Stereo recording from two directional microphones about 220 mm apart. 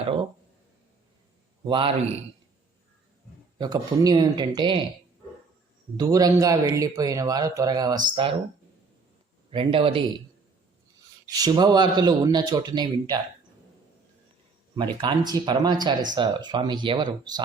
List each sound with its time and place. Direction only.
1.6 s speech: 25° right (ahead or behind)
3.6 s speech: 15° right (ahead or behind)
6.0 s speech: 15° right (ahead or behind)
9.5 s speech: 25° right (ahead or behind)
11.3 s speech: 15° right (ahead or behind)
15.0 s speech: 20° right (ahead or behind)